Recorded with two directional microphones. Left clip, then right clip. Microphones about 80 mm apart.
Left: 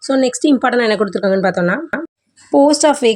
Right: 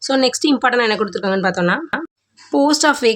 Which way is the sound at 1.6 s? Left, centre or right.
Centre.